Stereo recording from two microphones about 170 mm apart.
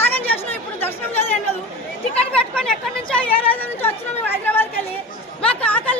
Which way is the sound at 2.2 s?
5° left (ahead or behind).